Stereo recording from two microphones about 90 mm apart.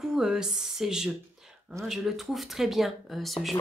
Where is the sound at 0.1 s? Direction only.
5° right (ahead or behind).